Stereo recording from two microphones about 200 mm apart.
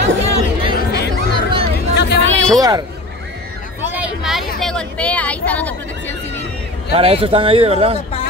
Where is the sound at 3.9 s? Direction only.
5° right (ahead or behind).